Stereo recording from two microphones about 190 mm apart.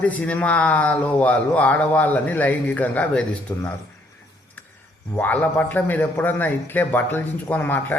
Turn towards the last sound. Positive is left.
turn(degrees=10)  # may be behind; listen again after turning